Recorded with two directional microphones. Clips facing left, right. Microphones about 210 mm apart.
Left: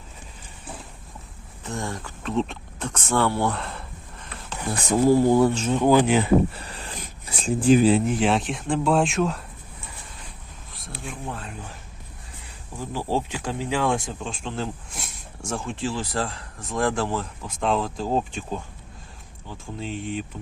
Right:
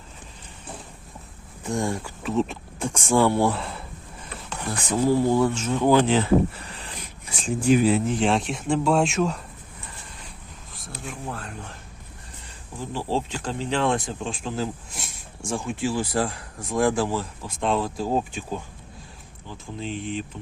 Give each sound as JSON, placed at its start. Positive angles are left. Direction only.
{"t": 1.6, "sound": "speech", "side_deg": -15}
{"t": 4.9, "sound": "speech", "side_deg": 45}
{"t": 5.7, "sound": "speech", "side_deg": 15}
{"t": 6.8, "sound": "a sound", "side_deg": 40}
{"t": 8.0, "sound": "speech", "side_deg": 0}
{"t": 11.0, "sound": "a sound", "side_deg": 0}
{"t": 12.9, "sound": "speech", "side_deg": 10}
{"t": 19.8, "sound": "speech", "side_deg": 5}